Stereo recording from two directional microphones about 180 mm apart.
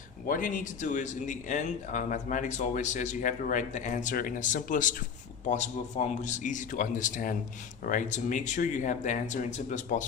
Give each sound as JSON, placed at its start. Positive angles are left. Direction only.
{"t": 0.3, "sound": "speech", "side_deg": 45}